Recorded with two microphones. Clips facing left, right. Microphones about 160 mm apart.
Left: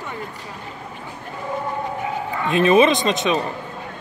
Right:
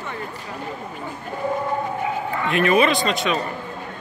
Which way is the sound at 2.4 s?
20° left (ahead or behind).